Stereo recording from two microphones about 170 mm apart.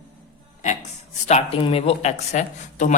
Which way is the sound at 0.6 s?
40° left (ahead or behind).